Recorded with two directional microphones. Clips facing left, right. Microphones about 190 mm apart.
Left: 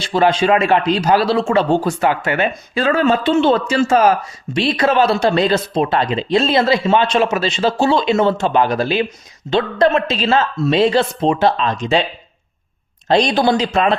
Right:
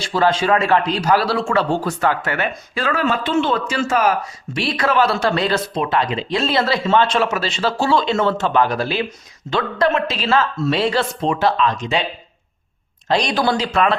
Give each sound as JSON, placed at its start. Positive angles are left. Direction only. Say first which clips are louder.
{"t": 0.0, "sound": "a man's voice", "louder": "left 3 dB", "side_deg": 20}
{"t": 5.8, "sound": "a man's voice", "louder": "left 3 dB", "side_deg": 30}
{"t": 13.1, "sound": "a man's voice", "louder": "left 4 dB", "side_deg": 25}